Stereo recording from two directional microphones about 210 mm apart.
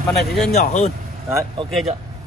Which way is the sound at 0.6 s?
35° left (ahead or behind).